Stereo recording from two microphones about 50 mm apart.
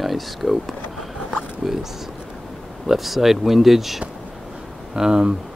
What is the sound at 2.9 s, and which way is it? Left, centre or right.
Speech, centre.